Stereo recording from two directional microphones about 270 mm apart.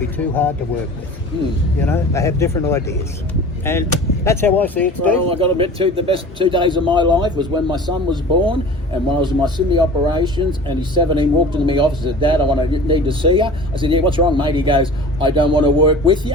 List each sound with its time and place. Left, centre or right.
0.2 s speech: centre
1.9 s speech: centre
5.3 s speech: centre